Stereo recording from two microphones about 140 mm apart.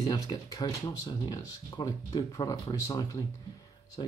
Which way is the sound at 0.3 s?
25° left (ahead or behind).